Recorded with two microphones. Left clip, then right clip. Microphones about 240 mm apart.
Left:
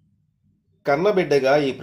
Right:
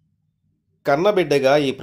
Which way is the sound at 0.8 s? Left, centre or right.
Right.